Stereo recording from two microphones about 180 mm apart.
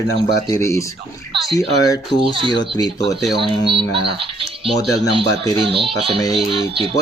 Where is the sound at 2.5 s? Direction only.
25° left (ahead or behind).